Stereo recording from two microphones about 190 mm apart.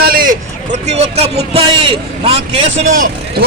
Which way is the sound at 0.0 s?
50° right (ahead or behind).